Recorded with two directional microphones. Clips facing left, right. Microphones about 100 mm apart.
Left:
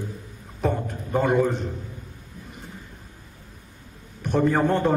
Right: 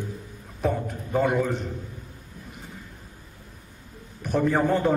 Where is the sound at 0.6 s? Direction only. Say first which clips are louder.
Left 1 dB; centre (ahead or behind).